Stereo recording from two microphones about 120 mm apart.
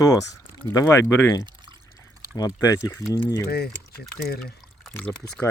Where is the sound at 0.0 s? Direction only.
30° left (ahead or behind).